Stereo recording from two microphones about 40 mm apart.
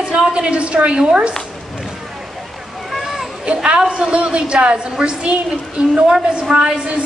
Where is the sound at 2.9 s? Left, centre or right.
Centre.